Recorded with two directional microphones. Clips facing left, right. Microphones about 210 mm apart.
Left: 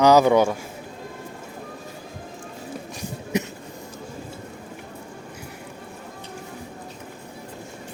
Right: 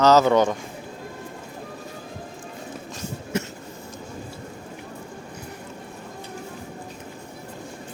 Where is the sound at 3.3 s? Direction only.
15° left (ahead or behind).